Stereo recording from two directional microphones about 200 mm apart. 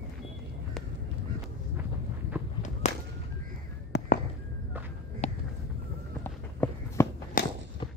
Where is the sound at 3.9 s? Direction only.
60° left (ahead or behind).